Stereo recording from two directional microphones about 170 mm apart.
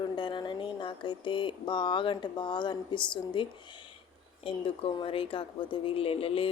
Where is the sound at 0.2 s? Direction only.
25° left (ahead or behind).